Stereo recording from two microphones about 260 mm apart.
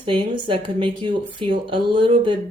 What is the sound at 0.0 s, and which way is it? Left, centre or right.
Speech, centre.